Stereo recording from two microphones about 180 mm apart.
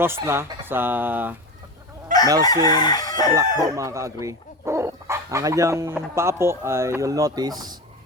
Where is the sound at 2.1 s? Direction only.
45° right (ahead or behind).